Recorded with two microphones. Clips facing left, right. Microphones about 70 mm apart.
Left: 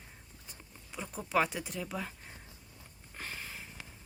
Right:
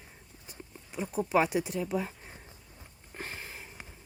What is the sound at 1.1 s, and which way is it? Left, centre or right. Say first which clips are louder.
Speech: right 5 dB; centre.